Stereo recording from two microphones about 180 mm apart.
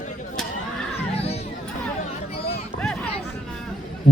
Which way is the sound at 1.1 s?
35° left (ahead or behind).